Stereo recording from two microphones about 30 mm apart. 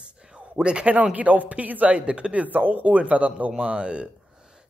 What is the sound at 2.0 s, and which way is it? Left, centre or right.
Speech, right.